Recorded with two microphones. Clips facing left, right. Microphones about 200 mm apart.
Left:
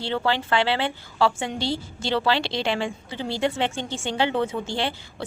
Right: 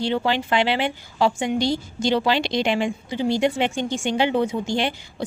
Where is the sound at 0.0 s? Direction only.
15° right (ahead or behind).